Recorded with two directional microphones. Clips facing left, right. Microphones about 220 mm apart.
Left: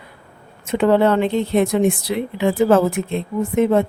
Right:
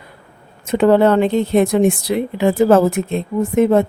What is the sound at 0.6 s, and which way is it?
Speech, 45° right (ahead or behind).